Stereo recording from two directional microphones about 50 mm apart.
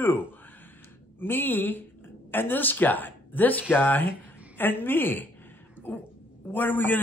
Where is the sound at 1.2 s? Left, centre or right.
Left.